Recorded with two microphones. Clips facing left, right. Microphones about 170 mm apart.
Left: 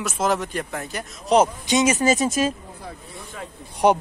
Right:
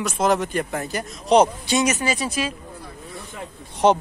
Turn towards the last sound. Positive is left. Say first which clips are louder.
# right 1 dB
turn(degrees=10)  # may be behind; listen again after turning